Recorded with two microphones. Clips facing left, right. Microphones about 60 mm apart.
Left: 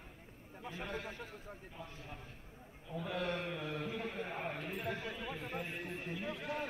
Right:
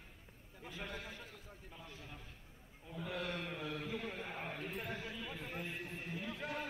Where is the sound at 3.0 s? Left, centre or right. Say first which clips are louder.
Left 3 dB; left.